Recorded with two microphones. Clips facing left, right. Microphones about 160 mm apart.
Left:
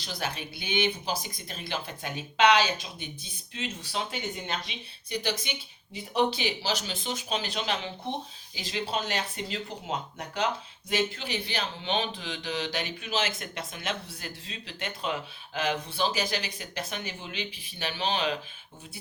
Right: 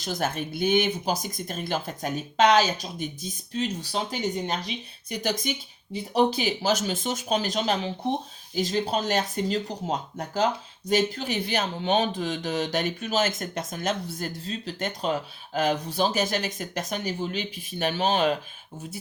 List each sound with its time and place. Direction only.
0.0 s speech: 45° right (ahead or behind)